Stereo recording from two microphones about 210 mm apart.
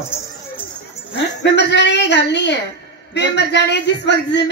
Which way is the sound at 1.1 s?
55° left (ahead or behind).